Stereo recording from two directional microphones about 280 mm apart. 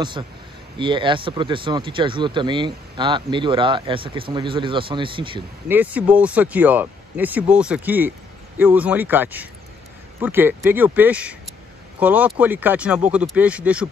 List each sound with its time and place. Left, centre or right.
0.2 s speech: centre
5.7 s speech: centre